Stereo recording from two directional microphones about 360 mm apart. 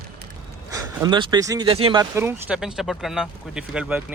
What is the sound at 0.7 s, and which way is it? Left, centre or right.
Speech, centre.